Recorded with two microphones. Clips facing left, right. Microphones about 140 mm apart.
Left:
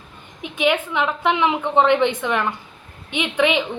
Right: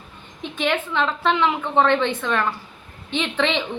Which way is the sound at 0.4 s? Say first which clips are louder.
Left 3 dB; 10° left (ahead or behind).